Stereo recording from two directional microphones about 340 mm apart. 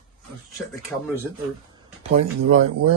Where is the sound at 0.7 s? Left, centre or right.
Centre.